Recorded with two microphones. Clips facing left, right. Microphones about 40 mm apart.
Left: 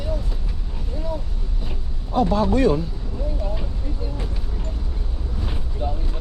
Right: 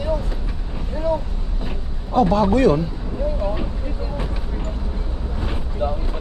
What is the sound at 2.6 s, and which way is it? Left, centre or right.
Speech, centre.